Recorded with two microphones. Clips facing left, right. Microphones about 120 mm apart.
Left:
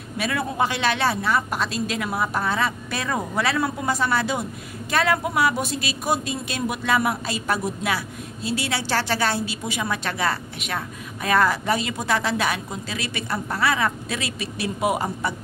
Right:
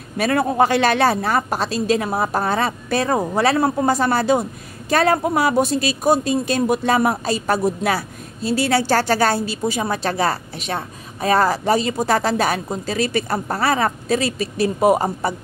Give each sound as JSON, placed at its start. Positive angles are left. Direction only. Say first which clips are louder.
{"t": 0.2, "sound": "speech", "louder": "right 7 dB", "side_deg": -45}